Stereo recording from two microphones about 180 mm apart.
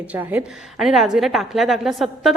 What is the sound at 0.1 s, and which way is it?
A woman's voice, 10° right (ahead or behind).